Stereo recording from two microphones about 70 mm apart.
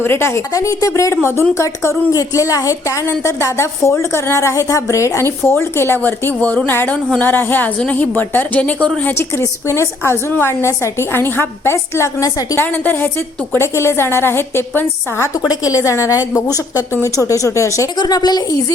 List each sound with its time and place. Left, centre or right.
0.0 s a woman's voice: left
0.5 s a woman's voice: left
1.1 s a woman's voice: left
9.1 s a woman's voice: left
12.2 s a woman's voice: left
12.5 s a woman's voice: left
15.4 s a woman's voice: left
17.9 s speech: left